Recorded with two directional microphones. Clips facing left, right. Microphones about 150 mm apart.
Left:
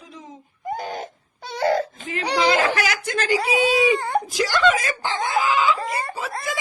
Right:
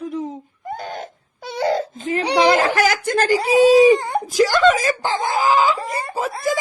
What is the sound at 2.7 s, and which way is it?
A woman's voice, 45° right (ahead or behind).